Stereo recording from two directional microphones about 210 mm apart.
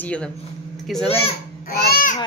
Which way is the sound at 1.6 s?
45° left (ahead or behind).